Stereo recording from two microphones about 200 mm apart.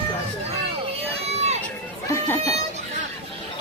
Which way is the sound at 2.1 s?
15° left (ahead or behind).